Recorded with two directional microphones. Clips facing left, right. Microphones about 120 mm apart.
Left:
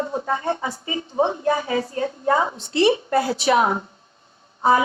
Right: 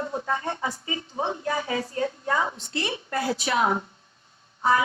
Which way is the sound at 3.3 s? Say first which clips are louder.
Left 8 dB; 70° left (ahead or behind).